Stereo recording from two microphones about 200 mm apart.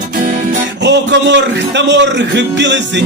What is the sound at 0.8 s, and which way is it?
Music, 60° right (ahead or behind).